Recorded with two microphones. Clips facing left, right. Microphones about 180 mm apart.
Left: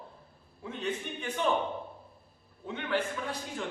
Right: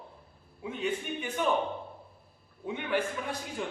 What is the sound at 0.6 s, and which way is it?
Speech, 10° right (ahead or behind).